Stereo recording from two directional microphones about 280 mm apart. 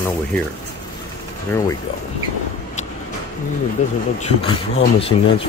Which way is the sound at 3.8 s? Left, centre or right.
Left.